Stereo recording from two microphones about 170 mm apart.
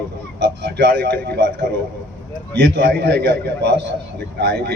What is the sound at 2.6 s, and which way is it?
A man's voice, 85° right.